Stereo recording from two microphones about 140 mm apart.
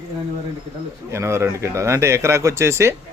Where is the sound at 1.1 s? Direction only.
20° right (ahead or behind).